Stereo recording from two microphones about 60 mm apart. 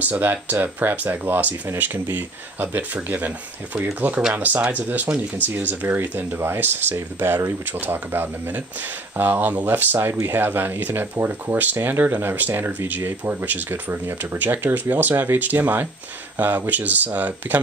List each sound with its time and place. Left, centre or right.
0.0 s speech: right